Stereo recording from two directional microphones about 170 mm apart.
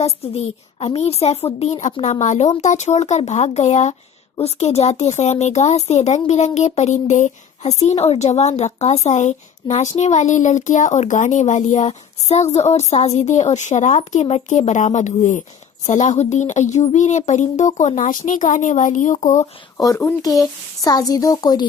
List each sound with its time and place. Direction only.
0.0 s speech: 35° left (ahead or behind)
19.7 s a woman's voice: 20° left (ahead or behind)